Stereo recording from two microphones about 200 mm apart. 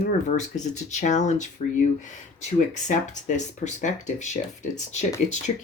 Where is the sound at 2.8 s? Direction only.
35° left (ahead or behind).